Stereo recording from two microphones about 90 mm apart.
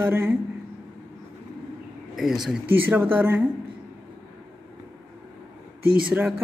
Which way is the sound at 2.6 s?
20° right (ahead or behind).